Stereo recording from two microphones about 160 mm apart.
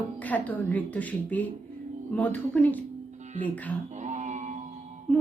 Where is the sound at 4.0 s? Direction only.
45° right (ahead or behind).